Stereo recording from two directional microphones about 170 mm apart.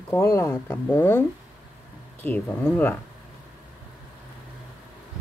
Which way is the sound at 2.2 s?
10° left (ahead or behind).